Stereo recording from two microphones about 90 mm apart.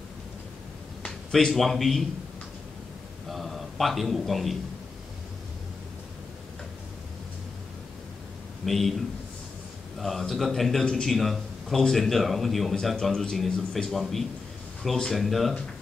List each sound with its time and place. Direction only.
1.0 s speech: 5° left (ahead or behind)
3.3 s a sound: centre (ahead or behind)
8.6 s a man's voice: centre (ahead or behind)
9.9 s a man's voice: centre (ahead or behind)